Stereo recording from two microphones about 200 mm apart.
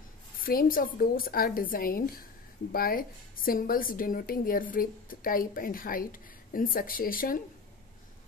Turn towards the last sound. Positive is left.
turn(degrees=45)  # may be behind; listen again after turning